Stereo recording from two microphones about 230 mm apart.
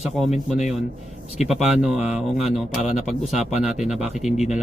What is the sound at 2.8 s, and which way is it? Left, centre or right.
Speech, left.